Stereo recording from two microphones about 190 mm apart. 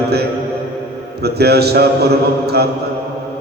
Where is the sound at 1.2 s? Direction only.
60° right (ahead or behind).